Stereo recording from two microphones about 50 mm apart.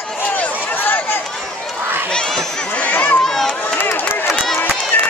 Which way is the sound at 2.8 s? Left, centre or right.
Left.